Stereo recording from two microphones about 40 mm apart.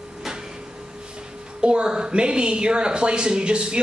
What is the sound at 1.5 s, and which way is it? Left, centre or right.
A woman's voice, right.